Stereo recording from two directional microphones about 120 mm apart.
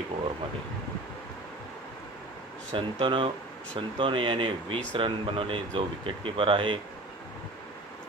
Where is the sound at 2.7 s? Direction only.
45° right (ahead or behind).